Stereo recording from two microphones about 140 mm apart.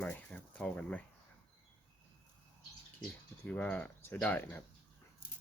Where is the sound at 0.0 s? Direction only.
10° left (ahead or behind).